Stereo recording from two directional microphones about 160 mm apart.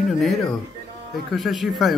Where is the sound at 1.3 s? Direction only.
Centre (ahead or behind).